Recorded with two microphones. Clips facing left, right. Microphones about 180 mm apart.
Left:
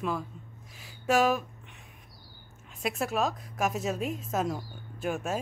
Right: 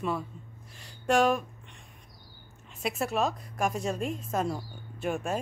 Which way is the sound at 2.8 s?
Centre (ahead or behind).